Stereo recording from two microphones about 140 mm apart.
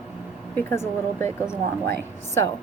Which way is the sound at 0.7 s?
20° left (ahead or behind).